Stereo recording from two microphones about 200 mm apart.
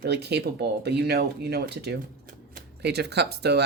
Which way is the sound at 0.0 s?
55° right (ahead or behind).